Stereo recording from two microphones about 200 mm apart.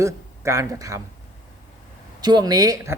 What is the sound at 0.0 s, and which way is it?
Speech, 15° right (ahead or behind).